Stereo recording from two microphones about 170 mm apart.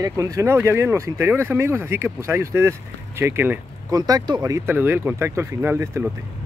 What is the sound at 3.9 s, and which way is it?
Speech, 25° right (ahead or behind).